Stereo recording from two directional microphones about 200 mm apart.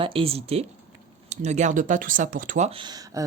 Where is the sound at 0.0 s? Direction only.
25° right (ahead or behind).